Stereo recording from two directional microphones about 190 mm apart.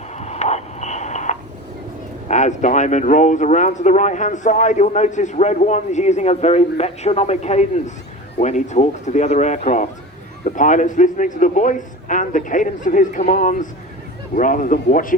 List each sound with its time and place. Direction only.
0.2 s radio: 35° left (ahead or behind)
2.2 s a man's voice: 40° left (ahead or behind)